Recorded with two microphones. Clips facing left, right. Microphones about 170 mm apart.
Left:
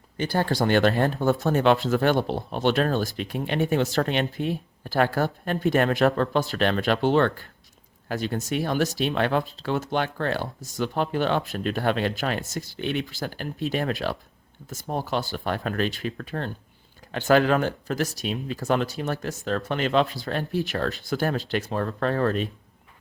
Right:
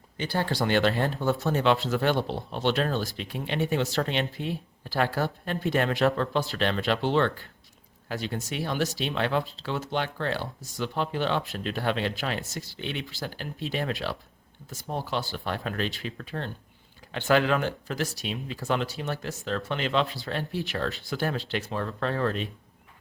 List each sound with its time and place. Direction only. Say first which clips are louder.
0.3 s speech: left 3 dB; 45° left (ahead or behind)